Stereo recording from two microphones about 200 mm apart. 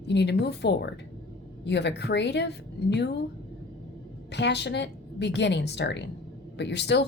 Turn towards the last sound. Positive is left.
turn(degrees=60)  # may be behind; listen again after turning